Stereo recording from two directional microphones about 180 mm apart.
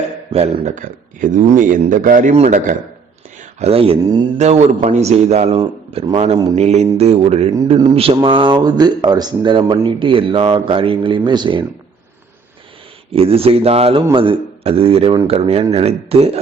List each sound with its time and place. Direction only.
0.3 s a man's voice: 35° right (ahead or behind)
4.4 s a man's voice: 40° right (ahead or behind)
13.1 s a man's voice: 35° right (ahead or behind)